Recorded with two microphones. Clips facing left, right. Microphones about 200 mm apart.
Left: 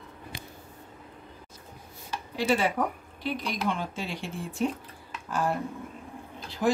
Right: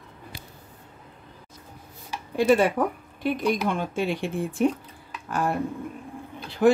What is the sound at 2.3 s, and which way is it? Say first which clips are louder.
A woman's voice: right 6 dB; 50° right (ahead or behind).